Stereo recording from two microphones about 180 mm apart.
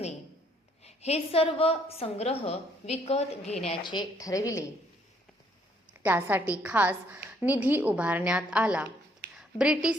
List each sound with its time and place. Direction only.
0.9 s a woman's voice: 35° left (ahead or behind); by 4.6 s 20° left (ahead or behind)
6.0 s a woman's voice: 10° right (ahead or behind)
9.3 s a sound: 5° right (ahead or behind)